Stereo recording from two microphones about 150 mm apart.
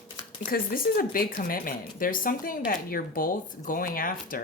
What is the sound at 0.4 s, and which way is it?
Speech, 70° left (ahead or behind).